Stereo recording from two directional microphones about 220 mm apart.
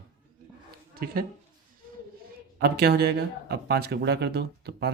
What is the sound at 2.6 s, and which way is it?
Speech, 45° right (ahead or behind).